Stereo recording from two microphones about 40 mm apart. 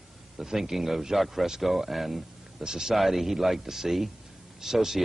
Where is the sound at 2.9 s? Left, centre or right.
Centre.